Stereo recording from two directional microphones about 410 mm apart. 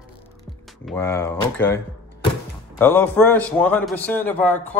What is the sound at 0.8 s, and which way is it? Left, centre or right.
Speech, centre.